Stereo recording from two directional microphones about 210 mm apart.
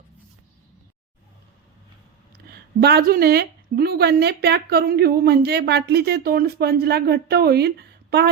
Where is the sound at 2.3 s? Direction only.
50° right (ahead or behind).